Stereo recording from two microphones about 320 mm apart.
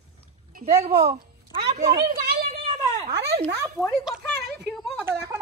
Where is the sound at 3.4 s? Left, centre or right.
Centre.